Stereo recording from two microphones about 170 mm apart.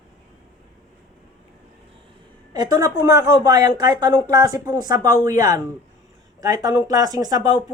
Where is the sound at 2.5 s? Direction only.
20° right (ahead or behind).